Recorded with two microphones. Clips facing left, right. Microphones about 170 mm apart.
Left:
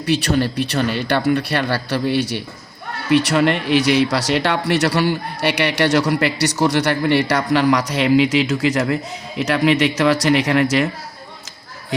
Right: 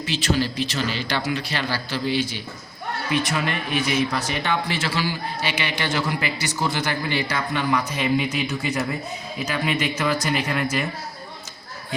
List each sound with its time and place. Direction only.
0.0 s speech: 65° left (ahead or behind)